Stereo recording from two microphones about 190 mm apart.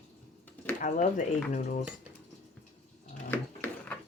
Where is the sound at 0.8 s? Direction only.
40° left (ahead or behind).